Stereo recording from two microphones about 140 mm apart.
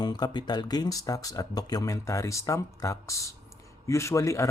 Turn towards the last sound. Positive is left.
turn(degrees=20)  # may be behind; listen again after turning